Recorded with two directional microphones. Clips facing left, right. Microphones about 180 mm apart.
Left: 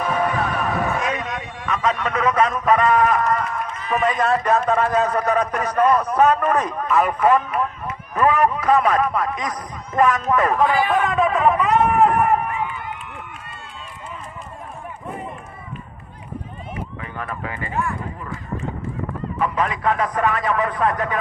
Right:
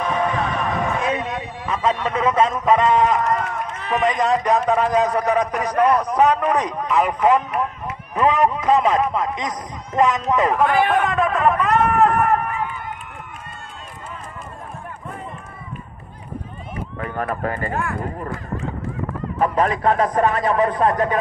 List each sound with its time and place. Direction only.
0.0 s music: 5° left (ahead or behind)
1.0 s a man's voice: 30° right (ahead or behind)
10.9 s speech: centre (ahead or behind)
17.4 s speech: 45° right (ahead or behind)
19.3 s a man's voice: 40° right (ahead or behind)